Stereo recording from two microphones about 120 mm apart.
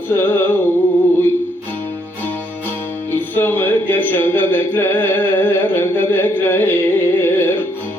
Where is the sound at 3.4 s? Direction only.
20° left (ahead or behind).